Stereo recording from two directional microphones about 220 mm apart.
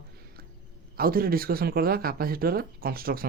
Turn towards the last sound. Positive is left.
turn(degrees=-40)  # may be behind; listen again after turning